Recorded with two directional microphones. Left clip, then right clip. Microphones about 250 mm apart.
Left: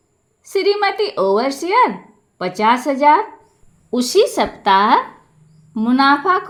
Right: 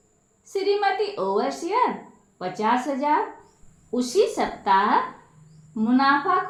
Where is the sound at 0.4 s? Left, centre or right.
Left.